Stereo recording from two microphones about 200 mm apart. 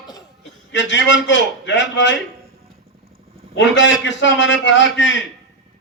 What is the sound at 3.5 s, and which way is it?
A man's voice, 65° left (ahead or behind).